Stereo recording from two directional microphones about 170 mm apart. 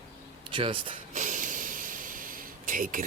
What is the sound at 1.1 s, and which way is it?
Snort, 50° right (ahead or behind).